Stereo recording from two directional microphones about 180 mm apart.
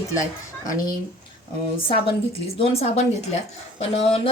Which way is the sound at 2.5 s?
35° left (ahead or behind).